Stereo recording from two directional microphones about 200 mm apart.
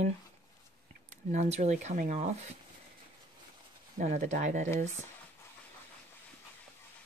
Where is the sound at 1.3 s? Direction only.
35° right (ahead or behind).